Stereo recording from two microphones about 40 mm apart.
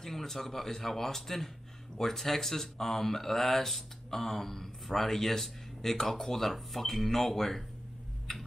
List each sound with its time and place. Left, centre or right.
0.0 s speech: centre